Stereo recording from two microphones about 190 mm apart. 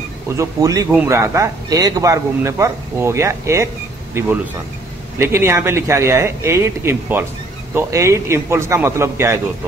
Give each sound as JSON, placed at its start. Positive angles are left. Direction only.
{"t": 0.3, "sound": "speech", "side_deg": -15}
{"t": 5.2, "sound": "speech", "side_deg": -15}